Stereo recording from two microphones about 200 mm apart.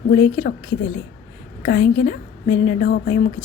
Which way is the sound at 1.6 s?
50° left (ahead or behind).